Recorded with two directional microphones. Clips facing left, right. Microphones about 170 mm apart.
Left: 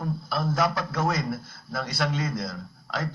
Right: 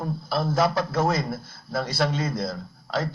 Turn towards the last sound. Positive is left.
turn(degrees=-30)  # may be behind; listen again after turning